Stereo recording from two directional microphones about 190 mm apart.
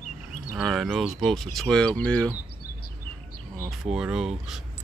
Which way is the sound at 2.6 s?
55° left (ahead or behind).